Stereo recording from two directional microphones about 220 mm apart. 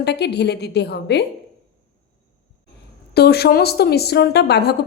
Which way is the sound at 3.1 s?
45° left (ahead or behind).